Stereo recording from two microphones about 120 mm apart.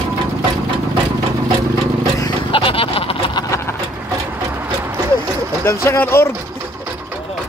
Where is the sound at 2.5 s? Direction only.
50° left (ahead or behind).